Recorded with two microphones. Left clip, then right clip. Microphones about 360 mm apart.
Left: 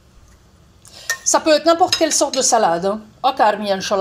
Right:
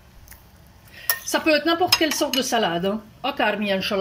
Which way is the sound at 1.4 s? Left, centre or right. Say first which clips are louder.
Left 5 dB; left.